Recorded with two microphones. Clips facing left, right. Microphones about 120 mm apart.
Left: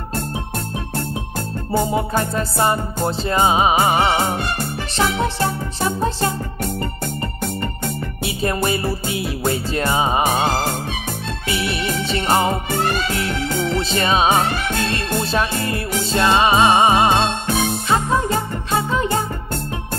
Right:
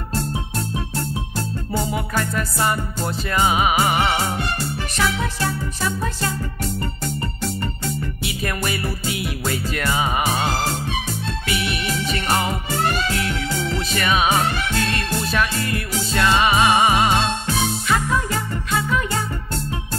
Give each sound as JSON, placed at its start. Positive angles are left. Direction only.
{"t": 1.9, "sound": "music", "side_deg": 25}
{"t": 8.3, "sound": "music", "side_deg": 25}
{"t": 13.7, "sound": "music", "side_deg": 30}
{"t": 17.5, "sound": "music", "side_deg": 55}
{"t": 17.8, "sound": "music", "side_deg": 25}